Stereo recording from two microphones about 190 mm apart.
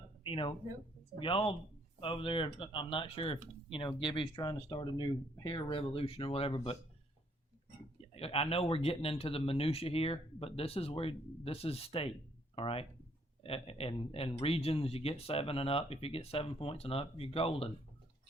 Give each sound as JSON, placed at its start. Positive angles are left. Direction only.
{"t": 0.2, "sound": "speech", "side_deg": 25}
{"t": 8.1, "sound": "a man's voice", "side_deg": 30}